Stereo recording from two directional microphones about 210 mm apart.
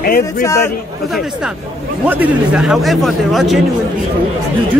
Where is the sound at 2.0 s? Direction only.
10° right (ahead or behind).